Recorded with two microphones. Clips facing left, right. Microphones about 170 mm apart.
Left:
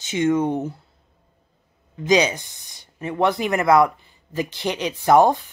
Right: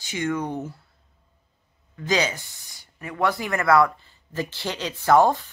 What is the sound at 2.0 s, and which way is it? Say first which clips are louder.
Speech: left 6 dB; 20° left (ahead or behind).